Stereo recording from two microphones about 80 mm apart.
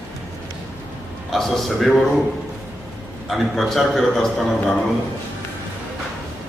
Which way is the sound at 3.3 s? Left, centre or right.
Centre.